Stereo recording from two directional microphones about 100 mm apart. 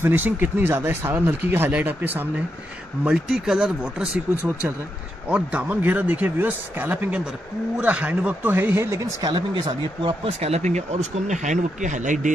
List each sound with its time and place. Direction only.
0.0 s speech: 20° right (ahead or behind)
3.0 s speech: 5° right (ahead or behind)
5.3 s speech: 10° right (ahead or behind)
9.2 s speech: 50° right (ahead or behind); by 11.0 s 90° right